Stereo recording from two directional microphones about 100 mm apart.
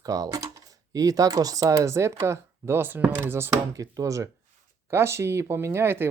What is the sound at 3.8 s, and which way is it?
Speech, 35° right (ahead or behind).